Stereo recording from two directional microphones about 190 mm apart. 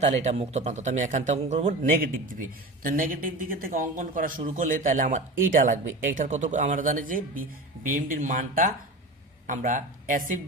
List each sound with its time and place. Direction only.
0.0 s a man's voice: 35° right (ahead or behind)